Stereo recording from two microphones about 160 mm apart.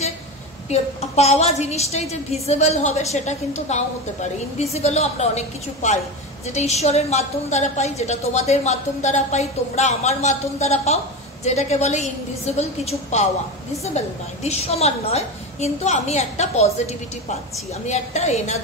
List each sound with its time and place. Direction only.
0.7 s a woman's voice: 40° left (ahead or behind)